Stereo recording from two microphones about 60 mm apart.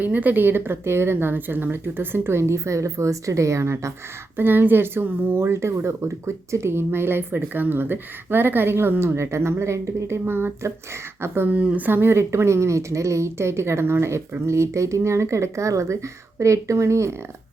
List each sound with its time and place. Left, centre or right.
0.0 s speech: right
2.4 s a woman's voice: right
4.4 s speech: right
5.4 s speech: right
10.2 s speech: right
11.4 s speech: right
11.9 s a woman's voice: right